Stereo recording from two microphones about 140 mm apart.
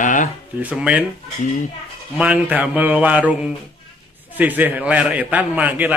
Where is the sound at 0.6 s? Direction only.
5° right (ahead or behind).